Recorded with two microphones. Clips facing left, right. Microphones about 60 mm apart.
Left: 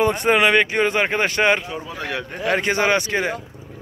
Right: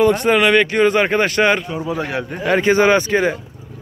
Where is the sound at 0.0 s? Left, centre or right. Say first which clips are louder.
Right 3 dB; left.